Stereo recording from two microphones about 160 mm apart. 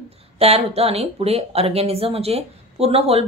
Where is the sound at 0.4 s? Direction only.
40° right (ahead or behind).